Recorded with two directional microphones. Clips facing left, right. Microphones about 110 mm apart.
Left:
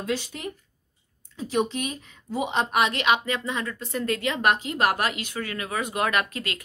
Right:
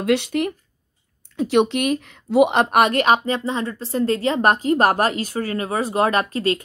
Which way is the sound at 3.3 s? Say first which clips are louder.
Right 6 dB; 30° right (ahead or behind).